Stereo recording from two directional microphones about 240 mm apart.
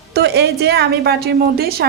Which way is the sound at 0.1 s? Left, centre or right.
Right.